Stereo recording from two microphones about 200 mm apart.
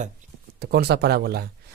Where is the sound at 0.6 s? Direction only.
55° right (ahead or behind).